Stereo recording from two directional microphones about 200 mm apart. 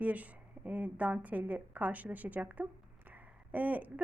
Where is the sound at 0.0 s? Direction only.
5° right (ahead or behind).